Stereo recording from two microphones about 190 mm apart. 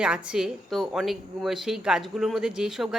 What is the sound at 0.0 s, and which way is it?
Speech, 5° right (ahead or behind).